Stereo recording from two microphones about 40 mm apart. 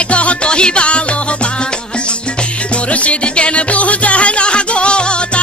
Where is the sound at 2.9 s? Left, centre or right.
Left.